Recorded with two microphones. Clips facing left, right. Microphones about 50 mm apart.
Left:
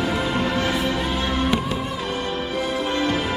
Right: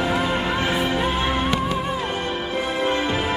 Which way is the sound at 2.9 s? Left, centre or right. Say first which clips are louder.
Left 1 dB; centre.